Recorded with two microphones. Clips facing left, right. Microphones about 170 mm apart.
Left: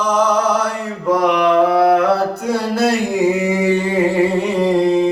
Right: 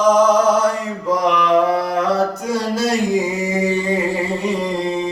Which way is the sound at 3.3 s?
60° left (ahead or behind).